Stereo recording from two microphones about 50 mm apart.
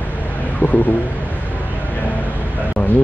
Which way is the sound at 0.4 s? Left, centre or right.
Left.